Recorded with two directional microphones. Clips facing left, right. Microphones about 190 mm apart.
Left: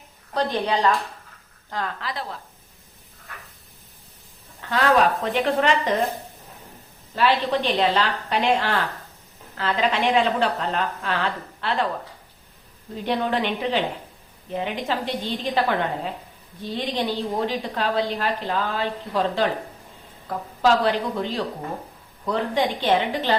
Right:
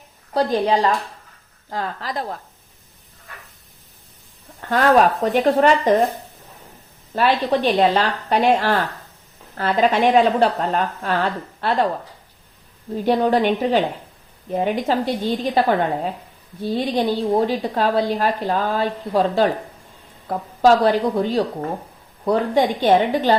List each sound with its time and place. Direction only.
0.3 s speech: 35° right (ahead or behind)
4.7 s speech: 45° right (ahead or behind)
7.2 s a woman's voice: 45° right (ahead or behind)
13.1 s a woman's voice: 40° right (ahead or behind)